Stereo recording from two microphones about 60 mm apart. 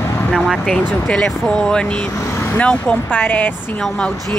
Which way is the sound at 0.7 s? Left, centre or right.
Centre.